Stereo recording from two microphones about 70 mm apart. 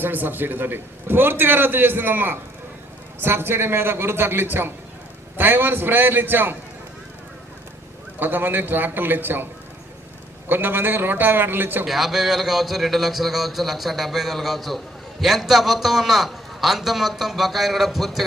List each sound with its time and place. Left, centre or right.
0.0 s a man's voice: right
8.2 s a man's voice: right
10.5 s a man's voice: right
11.9 s a man's voice: centre